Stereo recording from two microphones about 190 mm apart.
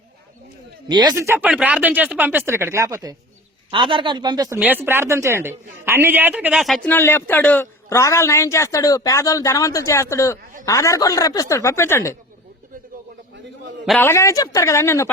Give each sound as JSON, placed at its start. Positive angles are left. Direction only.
{"t": 0.9, "sound": "speech", "side_deg": -20}
{"t": 14.0, "sound": "speech", "side_deg": 15}